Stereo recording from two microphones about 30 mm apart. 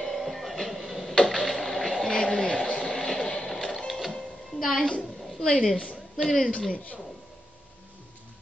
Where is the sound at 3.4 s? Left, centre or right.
Centre.